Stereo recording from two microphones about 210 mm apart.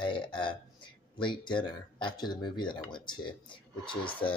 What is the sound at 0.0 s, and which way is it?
Speech, 20° left (ahead or behind).